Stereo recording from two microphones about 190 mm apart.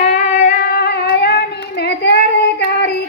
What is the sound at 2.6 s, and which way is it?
Music, 60° left (ahead or behind).